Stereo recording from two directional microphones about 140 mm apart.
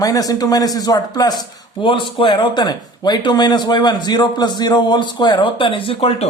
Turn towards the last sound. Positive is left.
turn(degrees=40)  # may be behind; listen again after turning